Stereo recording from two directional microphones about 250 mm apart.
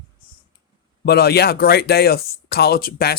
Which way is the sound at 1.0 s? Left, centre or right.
Left.